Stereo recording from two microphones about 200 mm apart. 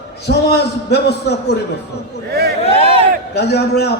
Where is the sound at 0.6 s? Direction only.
55° left (ahead or behind).